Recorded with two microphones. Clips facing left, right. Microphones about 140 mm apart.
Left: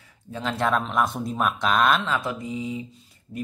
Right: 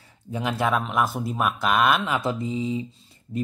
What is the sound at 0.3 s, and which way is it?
Speech, 10° right (ahead or behind).